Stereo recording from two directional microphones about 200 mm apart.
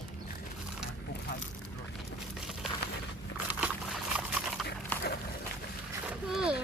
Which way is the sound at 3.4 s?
5° right (ahead or behind).